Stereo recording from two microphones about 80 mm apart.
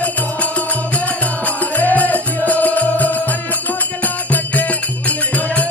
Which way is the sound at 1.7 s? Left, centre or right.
Left.